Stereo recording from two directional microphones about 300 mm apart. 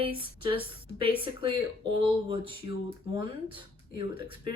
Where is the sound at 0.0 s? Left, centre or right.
Centre.